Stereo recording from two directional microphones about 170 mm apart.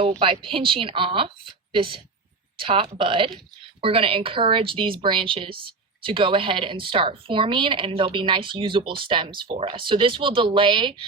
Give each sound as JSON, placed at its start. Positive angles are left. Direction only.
{"t": 0.2, "sound": "a woman's voice", "side_deg": -30}